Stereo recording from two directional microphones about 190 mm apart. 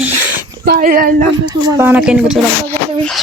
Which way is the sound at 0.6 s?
50° right (ahead or behind).